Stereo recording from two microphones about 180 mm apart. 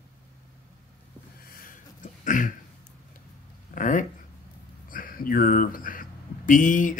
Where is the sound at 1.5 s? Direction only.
50° left (ahead or behind).